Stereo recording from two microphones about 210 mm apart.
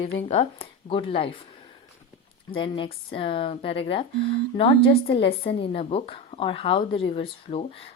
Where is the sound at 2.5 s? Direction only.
25° left (ahead or behind).